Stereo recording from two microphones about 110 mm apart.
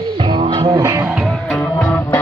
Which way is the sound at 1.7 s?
15° left (ahead or behind).